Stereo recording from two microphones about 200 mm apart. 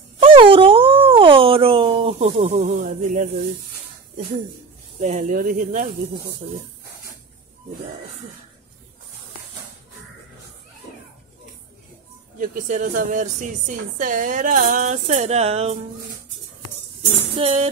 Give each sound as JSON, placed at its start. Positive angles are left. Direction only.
{"t": 0.2, "sound": "a sound", "side_deg": -25}
{"t": 5.0, "sound": "a woman's voice", "side_deg": -40}
{"t": 12.4, "sound": "a woman's voice", "side_deg": -40}
{"t": 17.4, "sound": "a woman's voice", "side_deg": -35}